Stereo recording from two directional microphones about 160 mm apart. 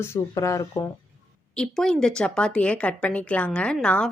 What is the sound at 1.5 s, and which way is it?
A woman's voice, 5° left (ahead or behind).